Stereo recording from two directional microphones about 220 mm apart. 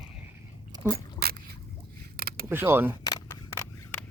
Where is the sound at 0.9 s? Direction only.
45° right (ahead or behind).